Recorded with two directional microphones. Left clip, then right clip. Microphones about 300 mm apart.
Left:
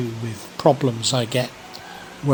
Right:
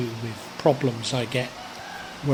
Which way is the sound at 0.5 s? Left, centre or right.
Centre.